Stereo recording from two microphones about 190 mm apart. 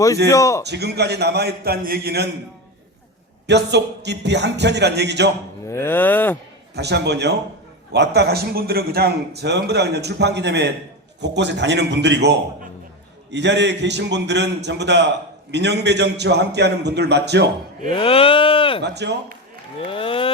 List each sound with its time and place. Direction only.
0.3 s a sound: 15° left (ahead or behind)
0.7 s a man's voice: 60° right (ahead or behind)
3.4 s a man's voice: 65° right (ahead or behind)
5.6 s a sound: 15° left (ahead or behind)
6.7 s a man's voice: 60° right (ahead or behind)
17.9 s speech: 30° left (ahead or behind)
18.8 s a man's voice: 65° right (ahead or behind)
19.9 s speech: 30° left (ahead or behind)